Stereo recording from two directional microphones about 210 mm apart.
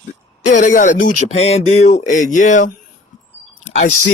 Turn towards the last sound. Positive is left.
turn(degrees=40)  # may be behind; listen again after turning